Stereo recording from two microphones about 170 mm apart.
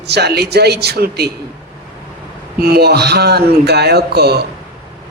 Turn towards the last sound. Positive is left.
turn(degrees=-70)  # may be behind; listen again after turning